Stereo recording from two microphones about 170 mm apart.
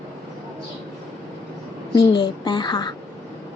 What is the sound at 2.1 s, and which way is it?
Speech, 25° left (ahead or behind).